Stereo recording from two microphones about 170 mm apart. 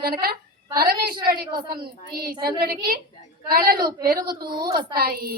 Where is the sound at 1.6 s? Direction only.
25° right (ahead or behind).